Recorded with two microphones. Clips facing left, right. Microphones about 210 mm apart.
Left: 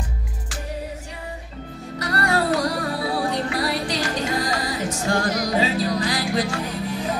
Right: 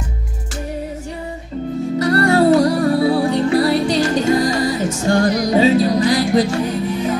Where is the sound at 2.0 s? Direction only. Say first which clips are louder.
Right 9 dB; 25° right (ahead or behind).